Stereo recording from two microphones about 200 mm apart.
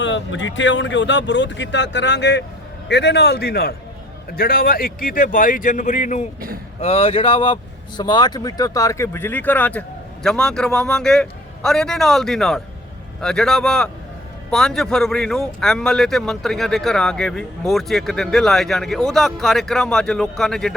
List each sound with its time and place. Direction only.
0.0 s speech: 65° left (ahead or behind); by 20.7 s centre (ahead or behind)